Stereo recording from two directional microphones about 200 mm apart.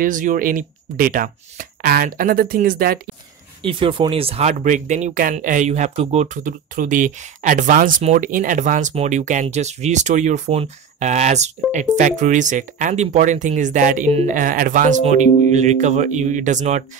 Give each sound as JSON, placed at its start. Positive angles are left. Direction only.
{"t": 0.0, "sound": "speech", "side_deg": -40}
{"t": 3.6, "sound": "speech", "side_deg": -25}